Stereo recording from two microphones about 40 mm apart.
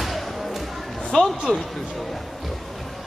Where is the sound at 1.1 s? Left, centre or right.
Centre.